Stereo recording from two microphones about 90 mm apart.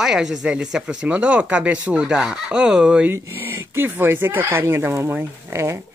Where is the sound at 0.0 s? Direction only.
5° right (ahead or behind).